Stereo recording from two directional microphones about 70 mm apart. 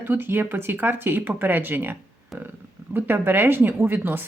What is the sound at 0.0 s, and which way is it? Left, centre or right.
Speech, right.